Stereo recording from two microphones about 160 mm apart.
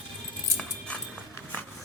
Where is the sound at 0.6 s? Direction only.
5° left (ahead or behind).